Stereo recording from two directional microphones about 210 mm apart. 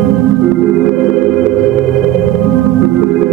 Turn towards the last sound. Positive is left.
turn(degrees=0)  # may be behind; listen again after turning